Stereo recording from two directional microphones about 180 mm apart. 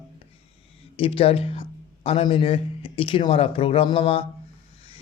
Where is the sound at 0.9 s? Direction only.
30° left (ahead or behind).